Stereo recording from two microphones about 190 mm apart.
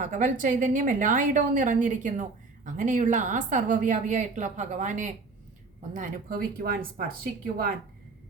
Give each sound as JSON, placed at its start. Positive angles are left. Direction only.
{"t": 0.0, "sound": "a woman's voice", "side_deg": -40}